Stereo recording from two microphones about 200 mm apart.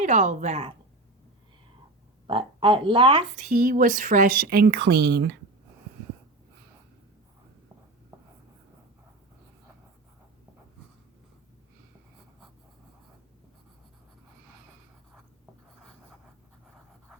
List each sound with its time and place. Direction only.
0.0 s a woman's voice: 35° right (ahead or behind)
2.2 s speech: 25° right (ahead or behind)
3.3 s a woman's voice: 40° right (ahead or behind)